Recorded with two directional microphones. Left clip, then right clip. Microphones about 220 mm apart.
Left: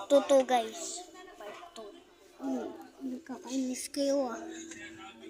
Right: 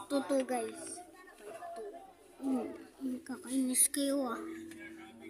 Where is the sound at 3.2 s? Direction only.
25° right (ahead or behind).